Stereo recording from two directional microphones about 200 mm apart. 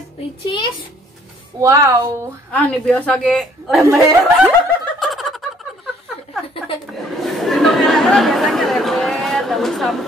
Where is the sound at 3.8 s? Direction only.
15° right (ahead or behind).